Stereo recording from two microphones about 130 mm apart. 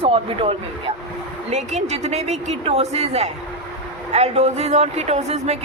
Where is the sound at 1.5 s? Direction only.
60° right (ahead or behind).